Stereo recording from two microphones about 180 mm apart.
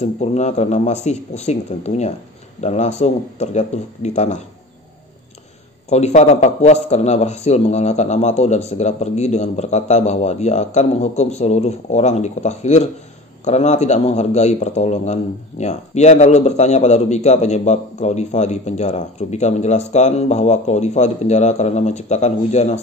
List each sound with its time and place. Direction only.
0.0 s speech: 40° left (ahead or behind)
5.9 s speech: 40° left (ahead or behind)